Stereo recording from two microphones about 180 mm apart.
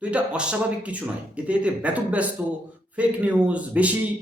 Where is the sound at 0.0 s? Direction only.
5° right (ahead or behind).